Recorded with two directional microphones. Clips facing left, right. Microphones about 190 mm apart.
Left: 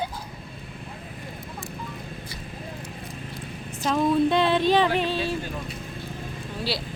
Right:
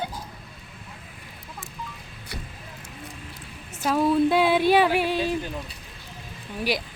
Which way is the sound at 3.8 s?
5° right (ahead or behind).